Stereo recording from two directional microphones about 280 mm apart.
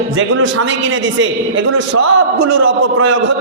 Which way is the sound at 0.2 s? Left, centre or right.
Right.